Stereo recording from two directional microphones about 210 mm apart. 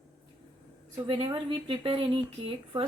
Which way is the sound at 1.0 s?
25° right (ahead or behind).